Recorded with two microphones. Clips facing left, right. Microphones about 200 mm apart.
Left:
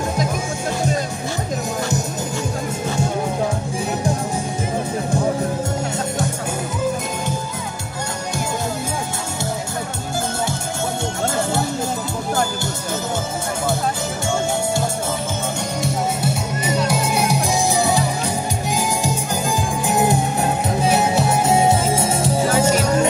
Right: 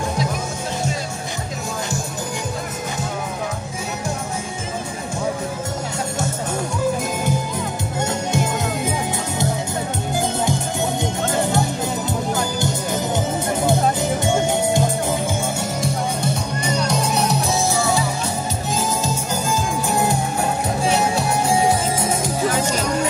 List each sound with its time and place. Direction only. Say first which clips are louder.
15.8 s music: left 3 dB; 5° left (ahead or behind)
19.9 s music: left 4 dB; 20° left (ahead or behind)